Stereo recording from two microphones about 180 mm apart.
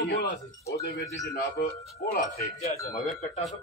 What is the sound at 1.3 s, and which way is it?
Speech, 60° left (ahead or behind).